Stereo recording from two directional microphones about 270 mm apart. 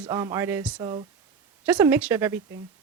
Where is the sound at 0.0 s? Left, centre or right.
Centre.